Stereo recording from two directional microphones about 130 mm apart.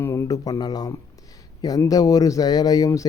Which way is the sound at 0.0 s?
20° left (ahead or behind).